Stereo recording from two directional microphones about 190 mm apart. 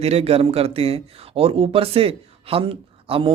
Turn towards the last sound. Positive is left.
turn(degrees=-30)  # may be behind; listen again after turning